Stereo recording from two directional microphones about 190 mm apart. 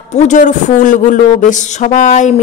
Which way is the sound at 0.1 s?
40° left (ahead or behind).